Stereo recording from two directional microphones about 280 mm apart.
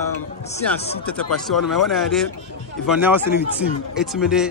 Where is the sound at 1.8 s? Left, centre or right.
Centre.